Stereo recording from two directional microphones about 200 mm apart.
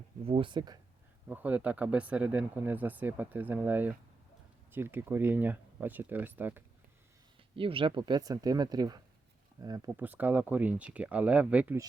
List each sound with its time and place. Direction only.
0.3 s speech: 25° right (ahead or behind)
1.3 s speech: 10° right (ahead or behind)
7.5 s speech: 25° right (ahead or behind); by 11.9 s 10° right (ahead or behind)